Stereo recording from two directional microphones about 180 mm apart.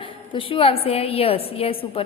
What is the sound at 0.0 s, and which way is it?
A woman's voice, 30° left (ahead or behind).